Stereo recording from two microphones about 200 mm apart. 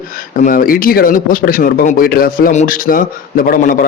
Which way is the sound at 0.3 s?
45° left (ahead or behind).